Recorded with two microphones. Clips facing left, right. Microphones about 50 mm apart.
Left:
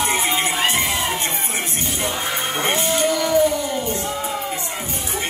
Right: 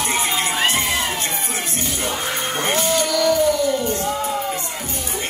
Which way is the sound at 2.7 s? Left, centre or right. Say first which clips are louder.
Even; left.